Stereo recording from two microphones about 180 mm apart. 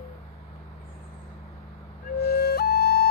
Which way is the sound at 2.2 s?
60° left (ahead or behind).